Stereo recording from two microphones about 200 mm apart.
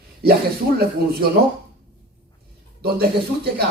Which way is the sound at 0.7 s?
50° right (ahead or behind).